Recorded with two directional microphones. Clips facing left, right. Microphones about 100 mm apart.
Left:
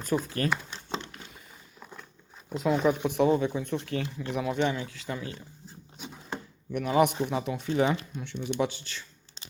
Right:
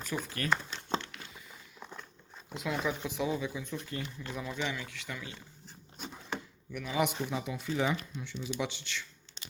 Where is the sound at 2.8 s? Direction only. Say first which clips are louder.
Left 11 dB; 55° left (ahead or behind).